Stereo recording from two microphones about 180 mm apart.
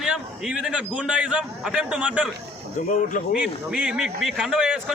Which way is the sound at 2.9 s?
50° left (ahead or behind).